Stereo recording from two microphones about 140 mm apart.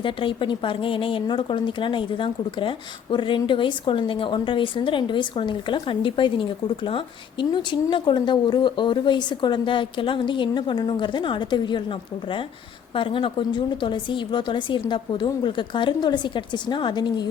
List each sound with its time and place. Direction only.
0.0 s speech: 35° left (ahead or behind)